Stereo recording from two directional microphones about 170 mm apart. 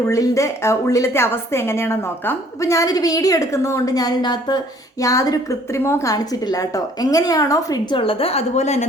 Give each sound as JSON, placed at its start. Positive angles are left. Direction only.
{"t": 0.1, "sound": "a woman's voice", "side_deg": 15}